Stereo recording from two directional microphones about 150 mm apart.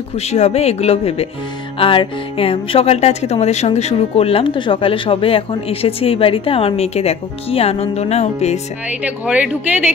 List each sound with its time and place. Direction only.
0.1 s speech: 45° left (ahead or behind)
9.0 s speech: 10° right (ahead or behind)